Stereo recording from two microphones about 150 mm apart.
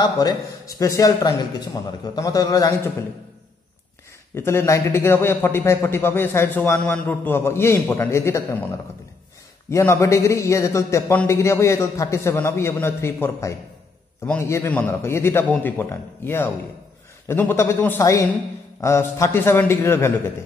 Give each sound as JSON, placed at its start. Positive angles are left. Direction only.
{"t": 0.0, "sound": "a man's voice", "side_deg": 25}
{"t": 4.4, "sound": "a man's voice", "side_deg": 15}
{"t": 9.7, "sound": "a man's voice", "side_deg": 20}